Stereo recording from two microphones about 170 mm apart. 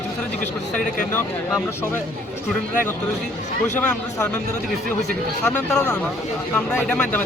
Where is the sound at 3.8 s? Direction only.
10° left (ahead or behind).